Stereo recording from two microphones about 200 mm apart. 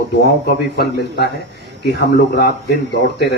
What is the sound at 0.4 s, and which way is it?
Speech, 55° left (ahead or behind).